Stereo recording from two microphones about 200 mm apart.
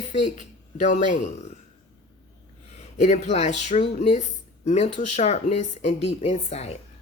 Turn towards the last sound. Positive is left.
turn(degrees=30)  # may be behind; listen again after turning